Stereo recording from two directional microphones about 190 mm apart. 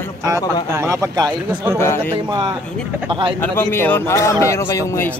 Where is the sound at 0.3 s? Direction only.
15° right (ahead or behind).